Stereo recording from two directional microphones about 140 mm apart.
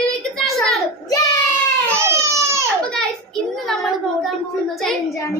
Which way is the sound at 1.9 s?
20° right (ahead or behind).